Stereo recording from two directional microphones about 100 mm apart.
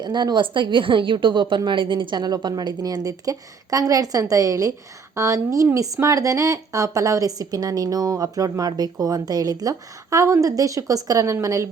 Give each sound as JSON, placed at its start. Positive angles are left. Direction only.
{"t": 0.0, "sound": "a woman's voice", "side_deg": -50}